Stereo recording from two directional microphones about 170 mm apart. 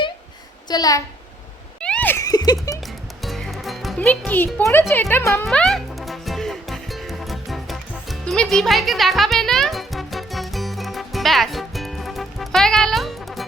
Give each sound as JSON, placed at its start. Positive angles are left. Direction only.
{"t": 0.7, "sound": "a child's voice", "side_deg": 20}
{"t": 1.8, "sound": "a sound", "side_deg": 5}
{"t": 3.2, "sound": "music", "side_deg": 0}
{"t": 4.6, "sound": "speech", "side_deg": 15}
{"t": 5.5, "sound": "music", "side_deg": 5}